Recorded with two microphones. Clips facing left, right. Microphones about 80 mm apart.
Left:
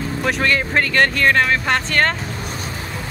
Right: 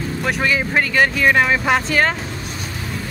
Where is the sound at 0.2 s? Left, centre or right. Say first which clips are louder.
Left 1 dB; centre.